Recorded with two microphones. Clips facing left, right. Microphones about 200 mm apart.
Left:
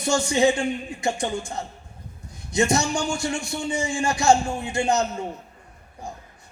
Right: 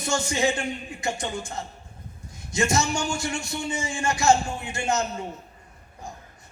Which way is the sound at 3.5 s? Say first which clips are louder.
Left 4 dB; 20° left (ahead or behind).